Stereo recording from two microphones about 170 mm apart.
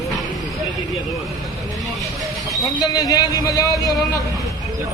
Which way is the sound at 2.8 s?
20° left (ahead or behind).